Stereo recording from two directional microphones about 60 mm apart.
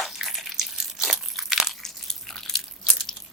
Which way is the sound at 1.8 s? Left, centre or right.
Centre.